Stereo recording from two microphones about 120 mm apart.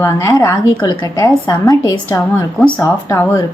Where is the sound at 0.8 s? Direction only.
35° left (ahead or behind).